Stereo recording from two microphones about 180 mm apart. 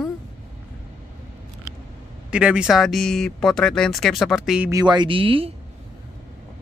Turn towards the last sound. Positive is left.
turn(degrees=-30)  # may be behind; listen again after turning